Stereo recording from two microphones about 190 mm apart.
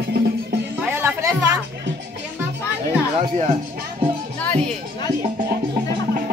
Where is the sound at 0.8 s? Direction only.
10° right (ahead or behind).